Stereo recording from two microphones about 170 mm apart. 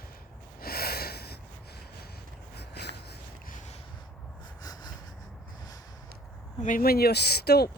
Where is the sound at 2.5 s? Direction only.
75° left (ahead or behind).